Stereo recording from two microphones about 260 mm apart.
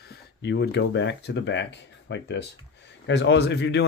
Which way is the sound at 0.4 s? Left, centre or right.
Left.